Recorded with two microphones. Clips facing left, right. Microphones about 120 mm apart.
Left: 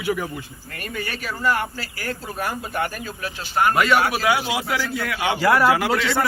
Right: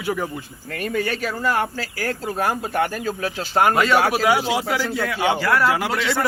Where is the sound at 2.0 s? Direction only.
90° right.